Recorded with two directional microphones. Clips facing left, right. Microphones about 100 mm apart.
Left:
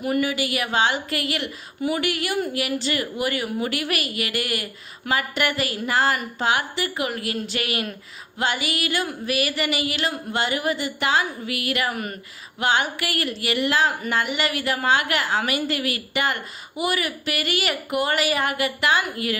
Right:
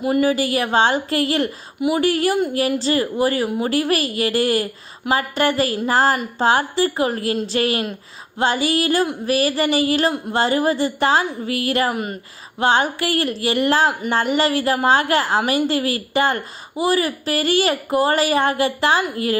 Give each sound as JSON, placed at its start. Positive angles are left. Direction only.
{"t": 0.0, "sound": "a woman's voice", "side_deg": -30}